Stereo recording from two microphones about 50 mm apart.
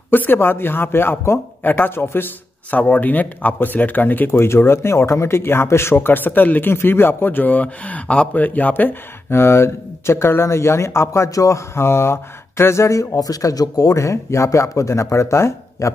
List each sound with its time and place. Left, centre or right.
0.1 s speech: left
2.7 s speech: left
4.3 s a man's voice: left
5.9 s speech: left
6.7 s a man's voice: left